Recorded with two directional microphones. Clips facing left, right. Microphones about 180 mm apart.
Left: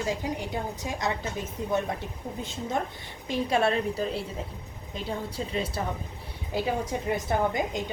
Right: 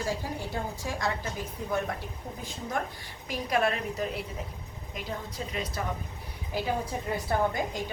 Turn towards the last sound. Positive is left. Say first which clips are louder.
# left 2 dB
turn(degrees=20)  # may be behind; listen again after turning